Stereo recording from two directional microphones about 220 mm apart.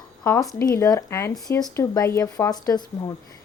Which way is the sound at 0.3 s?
15° left (ahead or behind).